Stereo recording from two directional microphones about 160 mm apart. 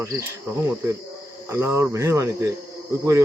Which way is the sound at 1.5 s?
15° right (ahead or behind).